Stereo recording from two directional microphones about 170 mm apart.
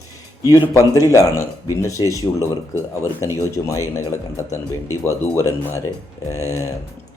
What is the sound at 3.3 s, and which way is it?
Mantra, 20° left (ahead or behind).